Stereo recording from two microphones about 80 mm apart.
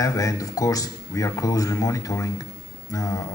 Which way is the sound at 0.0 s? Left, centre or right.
Left.